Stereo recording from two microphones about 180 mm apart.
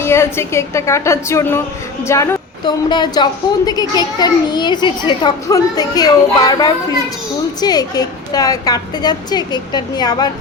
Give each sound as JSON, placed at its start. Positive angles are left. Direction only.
{"t": 0.0, "sound": "a woman's voice", "side_deg": 15}